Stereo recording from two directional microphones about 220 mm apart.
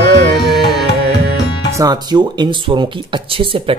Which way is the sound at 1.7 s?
15° right (ahead or behind).